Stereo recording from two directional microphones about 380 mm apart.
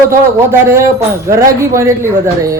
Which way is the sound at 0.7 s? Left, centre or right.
Centre.